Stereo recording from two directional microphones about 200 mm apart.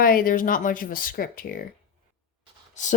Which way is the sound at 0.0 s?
45° left (ahead or behind).